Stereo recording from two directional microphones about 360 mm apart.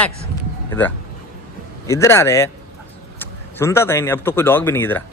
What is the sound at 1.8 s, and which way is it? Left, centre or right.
Speech, centre.